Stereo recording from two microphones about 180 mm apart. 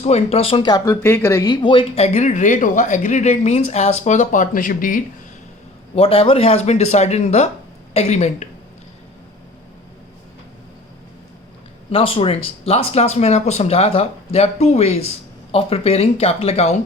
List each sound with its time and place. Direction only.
0.0 s speech: 35° left (ahead or behind)
5.9 s speech: 30° left (ahead or behind)
11.9 s speech: 30° left (ahead or behind)